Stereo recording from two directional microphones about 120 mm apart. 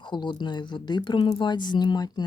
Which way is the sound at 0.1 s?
40° left (ahead or behind).